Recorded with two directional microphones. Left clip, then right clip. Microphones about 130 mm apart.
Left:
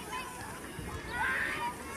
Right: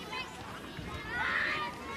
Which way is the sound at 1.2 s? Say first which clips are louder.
Even; 40° right (ahead or behind).